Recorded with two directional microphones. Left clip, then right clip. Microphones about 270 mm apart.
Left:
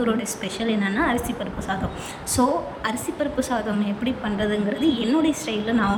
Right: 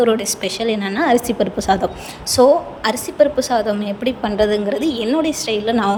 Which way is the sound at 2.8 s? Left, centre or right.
Centre.